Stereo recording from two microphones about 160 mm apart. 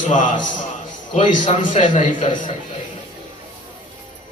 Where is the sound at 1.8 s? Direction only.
50° left (ahead or behind).